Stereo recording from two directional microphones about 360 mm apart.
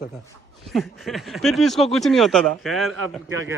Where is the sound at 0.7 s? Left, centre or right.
Centre.